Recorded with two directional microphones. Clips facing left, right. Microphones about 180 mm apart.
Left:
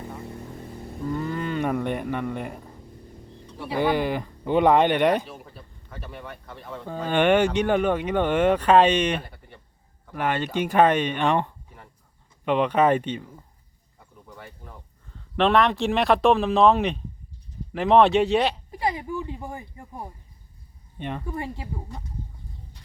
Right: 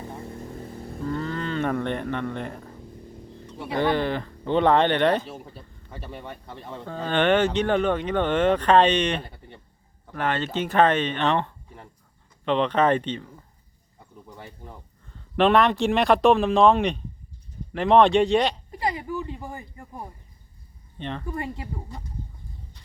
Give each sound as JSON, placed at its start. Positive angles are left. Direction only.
{"t": 1.0, "sound": "speech", "side_deg": 10}
{"t": 5.9, "sound": "speech", "side_deg": -30}
{"t": 6.8, "sound": "speech", "side_deg": 10}
{"t": 15.4, "sound": "speech", "side_deg": 0}
{"t": 19.2, "sound": "speech", "side_deg": 15}
{"t": 21.0, "sound": "speech", "side_deg": 10}